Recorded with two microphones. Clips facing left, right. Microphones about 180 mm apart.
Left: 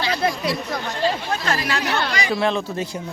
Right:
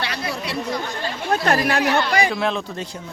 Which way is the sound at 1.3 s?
55° right (ahead or behind).